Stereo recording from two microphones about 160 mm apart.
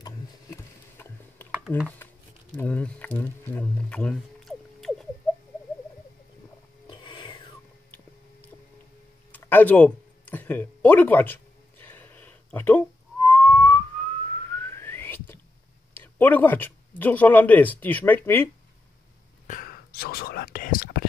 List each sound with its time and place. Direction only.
0.0 s a sound: 20° left (ahead or behind)
1.7 s speech: 10° left (ahead or behind)
6.9 s filing: 30° left (ahead or behind)
9.3 s a sound: 10° left (ahead or behind)
15.9 s speech: 10° left (ahead or behind)
19.4 s whispering: 60° left (ahead or behind)